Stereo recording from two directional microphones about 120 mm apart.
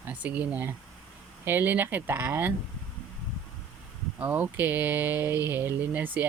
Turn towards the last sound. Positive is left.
turn(degrees=-15)  # may be behind; listen again after turning